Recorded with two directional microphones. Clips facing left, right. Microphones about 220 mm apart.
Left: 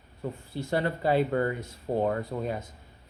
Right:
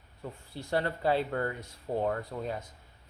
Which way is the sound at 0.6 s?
5° left (ahead or behind).